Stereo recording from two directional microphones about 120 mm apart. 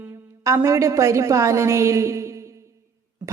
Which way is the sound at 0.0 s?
25° right (ahead or behind).